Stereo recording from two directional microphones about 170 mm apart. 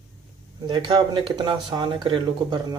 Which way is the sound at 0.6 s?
30° right (ahead or behind).